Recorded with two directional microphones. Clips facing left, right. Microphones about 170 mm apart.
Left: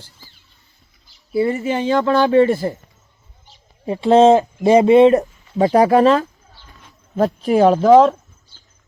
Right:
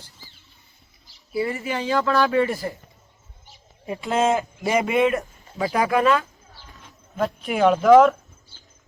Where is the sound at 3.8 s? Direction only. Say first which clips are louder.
Left 11 dB; 30° left (ahead or behind).